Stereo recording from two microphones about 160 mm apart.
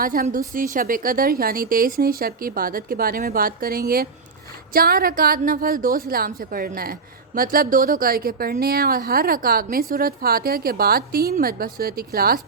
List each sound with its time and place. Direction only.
0.0 s a woman's voice: 60° right (ahead or behind)